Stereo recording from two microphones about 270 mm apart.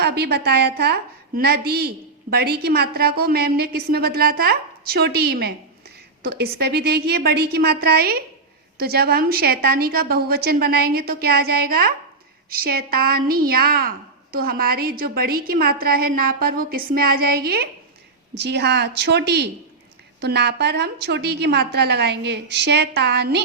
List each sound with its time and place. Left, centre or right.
0.0 s a woman's voice: right